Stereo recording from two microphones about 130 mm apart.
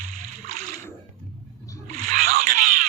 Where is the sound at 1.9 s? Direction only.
90° right.